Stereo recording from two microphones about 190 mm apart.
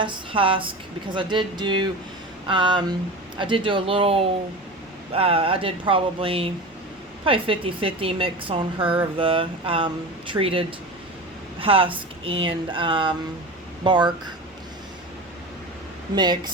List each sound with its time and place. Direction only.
0.0 s a woman's voice: 25° right (ahead or behind)
16.1 s a woman's voice: 20° right (ahead or behind)